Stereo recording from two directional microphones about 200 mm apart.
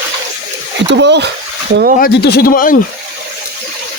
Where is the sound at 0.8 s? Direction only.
60° right (ahead or behind).